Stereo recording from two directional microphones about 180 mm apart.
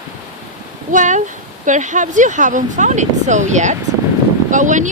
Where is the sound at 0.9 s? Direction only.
45° right (ahead or behind).